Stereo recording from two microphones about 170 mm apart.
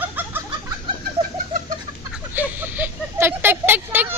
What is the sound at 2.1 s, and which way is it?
Speech, 10° right (ahead or behind).